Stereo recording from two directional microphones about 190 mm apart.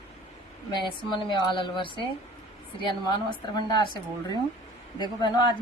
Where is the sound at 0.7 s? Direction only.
25° left (ahead or behind).